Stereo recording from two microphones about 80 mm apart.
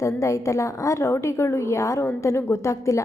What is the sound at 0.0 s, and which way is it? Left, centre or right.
A woman's voice, left.